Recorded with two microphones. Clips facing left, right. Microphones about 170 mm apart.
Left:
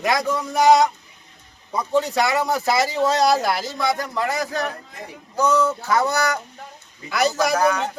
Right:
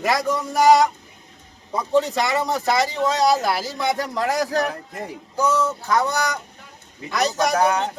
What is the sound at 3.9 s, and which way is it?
Speech, 35° right (ahead or behind).